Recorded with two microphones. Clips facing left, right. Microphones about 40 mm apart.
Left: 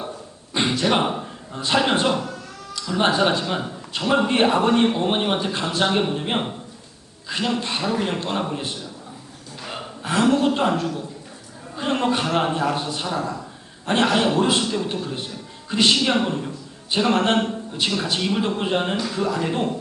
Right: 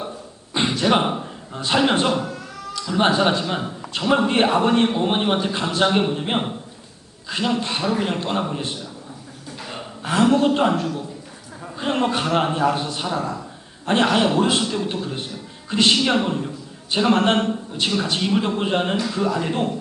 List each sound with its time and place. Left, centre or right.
0.5 s a man's voice: centre
10.0 s a woman's voice: centre